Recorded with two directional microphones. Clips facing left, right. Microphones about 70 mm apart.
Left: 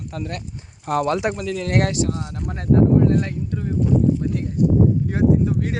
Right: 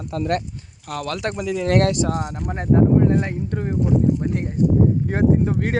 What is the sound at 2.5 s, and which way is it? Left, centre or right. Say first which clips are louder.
Speech: even; right.